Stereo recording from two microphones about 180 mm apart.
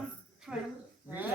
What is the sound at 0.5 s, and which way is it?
Speech, 5° right (ahead or behind).